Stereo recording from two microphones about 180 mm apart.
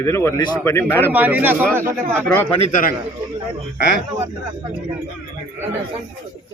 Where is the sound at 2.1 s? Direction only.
10° left (ahead or behind).